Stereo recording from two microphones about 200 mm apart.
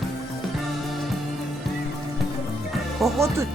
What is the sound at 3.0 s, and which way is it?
Speech, centre (ahead or behind).